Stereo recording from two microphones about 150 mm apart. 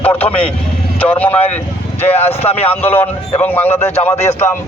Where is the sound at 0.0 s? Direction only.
10° left (ahead or behind).